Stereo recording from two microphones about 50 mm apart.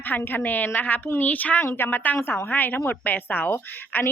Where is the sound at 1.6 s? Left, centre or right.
Left.